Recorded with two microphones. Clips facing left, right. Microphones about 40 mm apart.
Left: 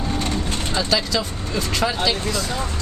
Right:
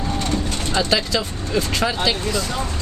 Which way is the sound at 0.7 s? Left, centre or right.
Centre.